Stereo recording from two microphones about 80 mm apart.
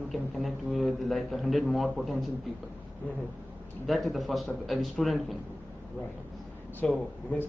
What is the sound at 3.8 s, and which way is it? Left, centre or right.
A man's voice, centre.